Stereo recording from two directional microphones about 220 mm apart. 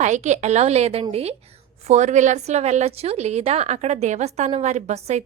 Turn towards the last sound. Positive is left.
turn(degrees=-30)  # may be behind; listen again after turning